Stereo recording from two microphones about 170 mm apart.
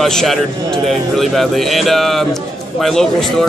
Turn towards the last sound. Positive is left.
turn(degrees=5)  # may be behind; listen again after turning